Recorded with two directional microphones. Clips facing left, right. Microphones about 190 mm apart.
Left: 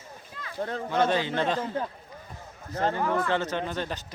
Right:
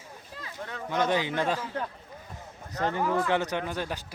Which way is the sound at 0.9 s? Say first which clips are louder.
Left 1 dB; 15° right (ahead or behind).